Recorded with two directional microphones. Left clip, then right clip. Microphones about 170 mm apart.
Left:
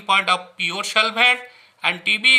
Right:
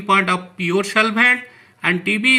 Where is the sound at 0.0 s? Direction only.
20° left (ahead or behind).